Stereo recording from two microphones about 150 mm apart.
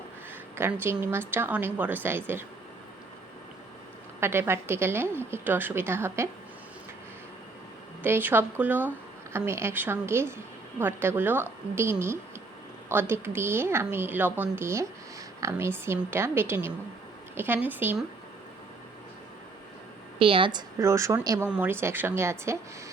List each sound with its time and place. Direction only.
0.5 s a woman's voice: 15° right (ahead or behind)
4.2 s a woman's voice: 15° right (ahead or behind)
8.0 s a woman's voice: 15° right (ahead or behind)
20.1 s a woman's voice: 35° right (ahead or behind); by 22.5 s 15° right (ahead or behind)